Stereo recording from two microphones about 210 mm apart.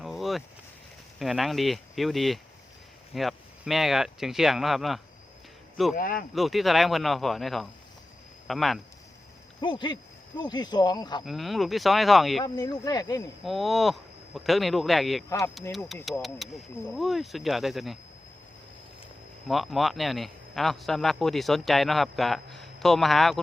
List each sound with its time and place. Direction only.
0.0 s a sound: centre (ahead or behind)
1.2 s speech: centre (ahead or behind)
6.0 s speech: 40° left (ahead or behind)
6.3 s speech: centre (ahead or behind)
9.6 s speech: 20° left (ahead or behind)
11.3 s speech: centre (ahead or behind)
12.4 s speech: 15° left (ahead or behind)
13.4 s speech: centre (ahead or behind)
16.2 s speech: centre (ahead or behind)
19.5 s speech: centre (ahead or behind)